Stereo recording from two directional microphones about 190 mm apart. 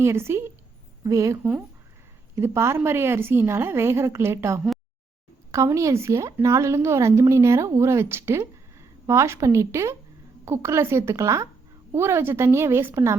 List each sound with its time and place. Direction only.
0.0 s a woman's voice: 15° right (ahead or behind)